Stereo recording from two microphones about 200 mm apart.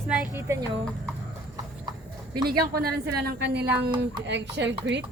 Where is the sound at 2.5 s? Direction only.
50° right (ahead or behind).